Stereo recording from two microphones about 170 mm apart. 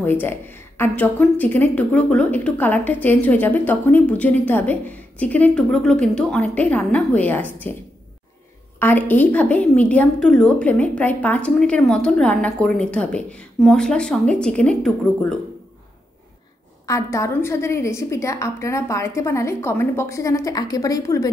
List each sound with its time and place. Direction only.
0.0 s a woman's voice: 10° left (ahead or behind)
8.7 s a woman's voice: 10° left (ahead or behind)
16.8 s a woman's voice: 20° left (ahead or behind)